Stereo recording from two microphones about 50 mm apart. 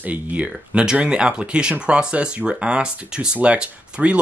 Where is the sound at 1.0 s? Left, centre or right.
Centre.